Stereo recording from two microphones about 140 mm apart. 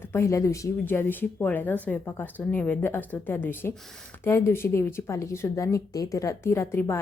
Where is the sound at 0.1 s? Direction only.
20° left (ahead or behind).